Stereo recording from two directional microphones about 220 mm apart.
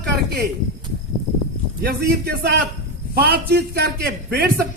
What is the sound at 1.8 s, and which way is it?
A man's voice, 45° right (ahead or behind).